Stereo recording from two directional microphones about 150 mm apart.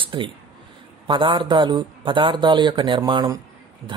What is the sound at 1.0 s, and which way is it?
Speech, 35° right (ahead or behind).